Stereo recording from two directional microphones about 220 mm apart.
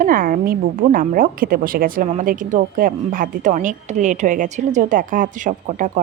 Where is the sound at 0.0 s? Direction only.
40° right (ahead or behind).